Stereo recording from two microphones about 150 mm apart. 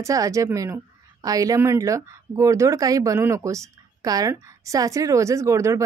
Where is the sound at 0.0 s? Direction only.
20° right (ahead or behind).